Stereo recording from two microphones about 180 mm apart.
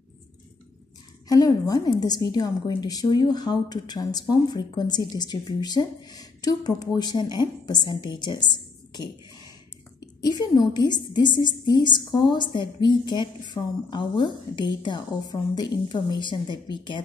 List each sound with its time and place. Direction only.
1.3 s a woman's voice: 20° left (ahead or behind)
10.2 s a woman's voice: 25° left (ahead or behind)